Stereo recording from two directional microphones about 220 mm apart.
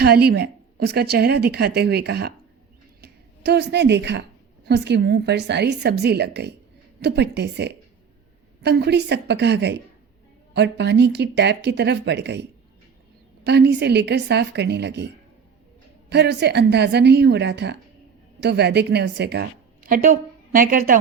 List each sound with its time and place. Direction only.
0.0 s a woman's voice: 45° right (ahead or behind)